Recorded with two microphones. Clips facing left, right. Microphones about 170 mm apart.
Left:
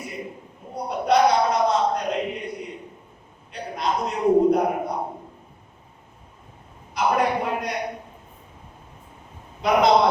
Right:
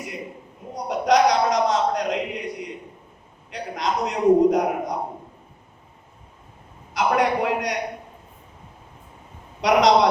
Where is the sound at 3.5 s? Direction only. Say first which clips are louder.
Even; 80° right.